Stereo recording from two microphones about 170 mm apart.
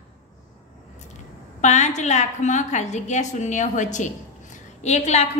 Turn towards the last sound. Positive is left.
turn(degrees=40)  # may be behind; listen again after turning